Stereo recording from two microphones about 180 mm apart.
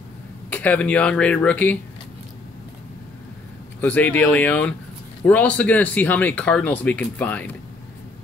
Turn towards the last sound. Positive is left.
turn(degrees=10)  # may be behind; listen again after turning